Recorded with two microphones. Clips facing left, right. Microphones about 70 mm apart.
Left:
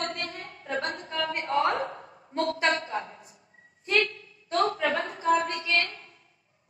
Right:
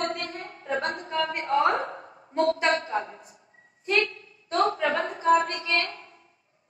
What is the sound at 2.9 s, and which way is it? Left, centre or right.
Speech, right.